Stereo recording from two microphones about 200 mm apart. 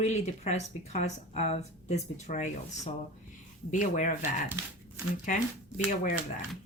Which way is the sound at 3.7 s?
40° left (ahead or behind).